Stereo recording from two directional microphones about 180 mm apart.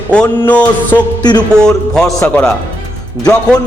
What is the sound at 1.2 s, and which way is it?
Speech, 25° left (ahead or behind).